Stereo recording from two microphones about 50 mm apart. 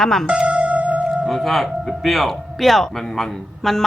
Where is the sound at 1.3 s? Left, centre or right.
Centre.